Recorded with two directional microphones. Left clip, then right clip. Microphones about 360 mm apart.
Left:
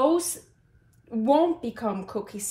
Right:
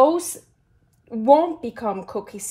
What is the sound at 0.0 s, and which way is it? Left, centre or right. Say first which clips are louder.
A woman's voice: right 6 dB; centre.